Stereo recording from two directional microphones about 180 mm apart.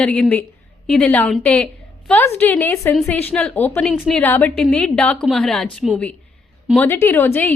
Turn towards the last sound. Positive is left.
turn(degrees=10)  # may be behind; listen again after turning